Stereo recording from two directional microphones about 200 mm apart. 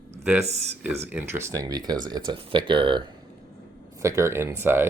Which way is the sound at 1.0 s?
10° right (ahead or behind).